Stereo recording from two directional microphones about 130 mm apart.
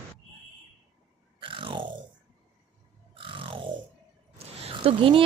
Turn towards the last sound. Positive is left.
turn(degrees=-45)  # may be behind; listen again after turning